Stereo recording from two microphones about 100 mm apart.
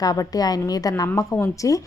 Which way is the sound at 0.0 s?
40° left (ahead or behind).